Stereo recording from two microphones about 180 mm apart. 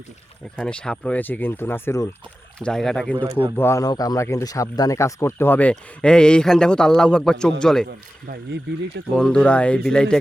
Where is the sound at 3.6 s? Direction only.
15° left (ahead or behind).